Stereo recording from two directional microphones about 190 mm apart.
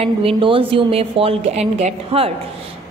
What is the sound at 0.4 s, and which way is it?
A woman's voice, 30° right (ahead or behind).